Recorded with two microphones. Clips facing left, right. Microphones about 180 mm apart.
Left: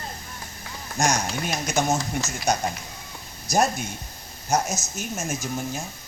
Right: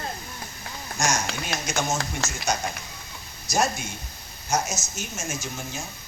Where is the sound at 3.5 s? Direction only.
55° left (ahead or behind).